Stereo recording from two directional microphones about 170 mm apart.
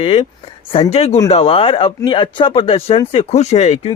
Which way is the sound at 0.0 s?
35° left (ahead or behind).